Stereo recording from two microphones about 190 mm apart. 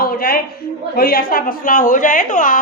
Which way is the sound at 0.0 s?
50° left (ahead or behind).